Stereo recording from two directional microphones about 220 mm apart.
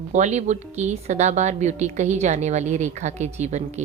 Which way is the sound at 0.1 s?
30° right (ahead or behind).